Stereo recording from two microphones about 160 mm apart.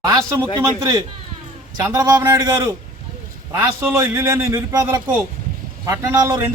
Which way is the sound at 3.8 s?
15° right (ahead or behind).